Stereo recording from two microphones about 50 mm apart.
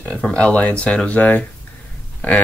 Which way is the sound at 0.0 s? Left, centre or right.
Left.